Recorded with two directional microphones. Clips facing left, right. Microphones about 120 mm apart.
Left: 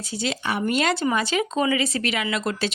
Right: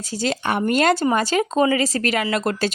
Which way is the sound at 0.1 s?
45° right (ahead or behind).